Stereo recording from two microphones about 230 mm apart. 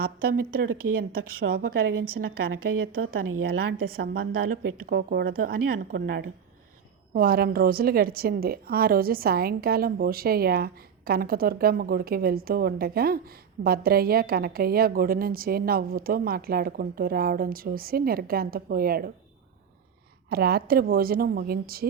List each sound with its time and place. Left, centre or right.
0.0 s a woman's voice: right
3.4 s a woman's voice: right
20.3 s a woman's voice: right